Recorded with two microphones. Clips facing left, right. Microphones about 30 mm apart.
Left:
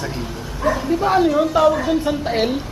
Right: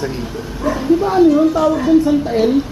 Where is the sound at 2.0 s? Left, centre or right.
Left.